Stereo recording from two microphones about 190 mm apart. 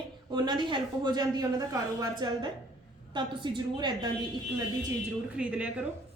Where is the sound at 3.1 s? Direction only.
25° right (ahead or behind).